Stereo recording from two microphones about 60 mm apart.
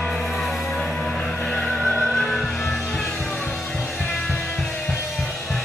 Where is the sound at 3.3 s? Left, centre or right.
Left.